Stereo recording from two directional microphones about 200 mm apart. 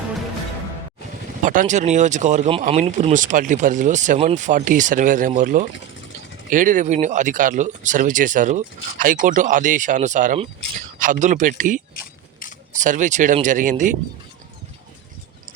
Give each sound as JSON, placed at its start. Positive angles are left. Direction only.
{"t": 1.4, "sound": "speech", "side_deg": -40}